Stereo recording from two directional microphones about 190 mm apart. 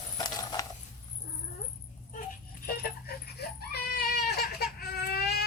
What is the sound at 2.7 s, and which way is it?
Goat, 55° left (ahead or behind).